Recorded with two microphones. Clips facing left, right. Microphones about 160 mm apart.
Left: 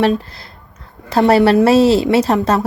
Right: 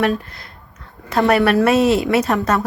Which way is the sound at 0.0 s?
30° left (ahead or behind).